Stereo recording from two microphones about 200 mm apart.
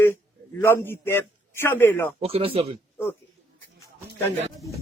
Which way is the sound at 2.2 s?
30° right (ahead or behind).